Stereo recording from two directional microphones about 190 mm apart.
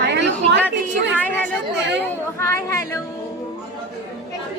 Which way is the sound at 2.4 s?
15° left (ahead or behind).